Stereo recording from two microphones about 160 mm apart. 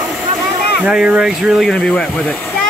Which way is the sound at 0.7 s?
5° right (ahead or behind).